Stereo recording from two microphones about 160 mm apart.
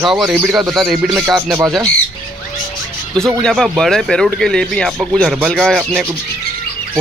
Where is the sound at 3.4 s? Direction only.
5° left (ahead or behind).